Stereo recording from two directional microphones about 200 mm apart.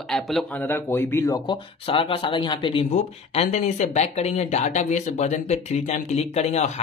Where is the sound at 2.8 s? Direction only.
35° left (ahead or behind).